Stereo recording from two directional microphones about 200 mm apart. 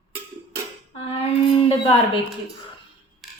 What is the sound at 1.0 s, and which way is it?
Speech, 30° left (ahead or behind).